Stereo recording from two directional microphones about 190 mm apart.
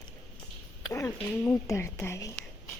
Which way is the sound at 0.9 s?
15° left (ahead or behind).